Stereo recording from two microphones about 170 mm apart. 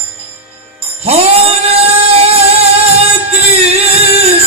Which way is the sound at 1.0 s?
35° right (ahead or behind).